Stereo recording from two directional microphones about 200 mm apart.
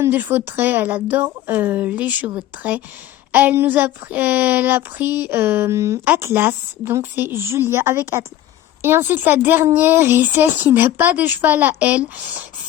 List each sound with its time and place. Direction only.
0.0 s speech: 10° right (ahead or behind)